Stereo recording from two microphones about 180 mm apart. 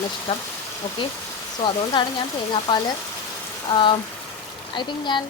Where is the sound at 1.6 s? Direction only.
25° left (ahead or behind).